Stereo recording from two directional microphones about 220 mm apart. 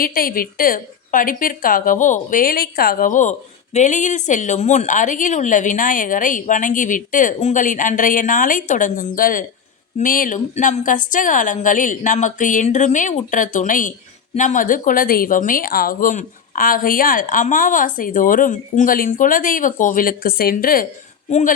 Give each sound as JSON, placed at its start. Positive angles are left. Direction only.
{"t": 0.0, "sound": "a woman's voice", "side_deg": 40}